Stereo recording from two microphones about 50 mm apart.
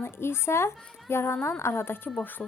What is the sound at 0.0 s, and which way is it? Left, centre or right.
A woman's voice, left.